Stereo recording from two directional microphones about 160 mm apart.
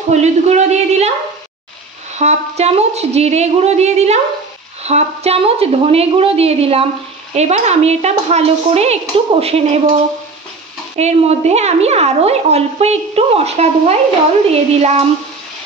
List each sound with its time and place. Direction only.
0.1 s a woman's voice: 45° right (ahead or behind)
2.1 s a woman's voice: 40° right (ahead or behind)
11.0 s a woman's voice: 45° right (ahead or behind)